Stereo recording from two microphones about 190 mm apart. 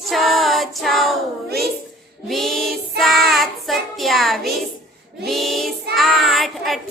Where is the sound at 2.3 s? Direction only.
Centre (ahead or behind).